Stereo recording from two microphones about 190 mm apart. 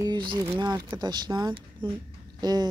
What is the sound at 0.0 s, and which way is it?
Speech, 25° right (ahead or behind).